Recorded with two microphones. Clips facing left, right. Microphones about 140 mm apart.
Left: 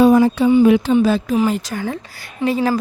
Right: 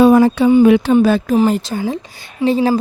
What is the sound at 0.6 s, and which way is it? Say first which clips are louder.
Speech: right 3 dB; 75° right (ahead or behind).